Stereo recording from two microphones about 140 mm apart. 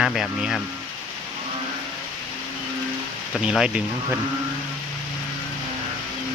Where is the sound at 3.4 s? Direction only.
5° right (ahead or behind).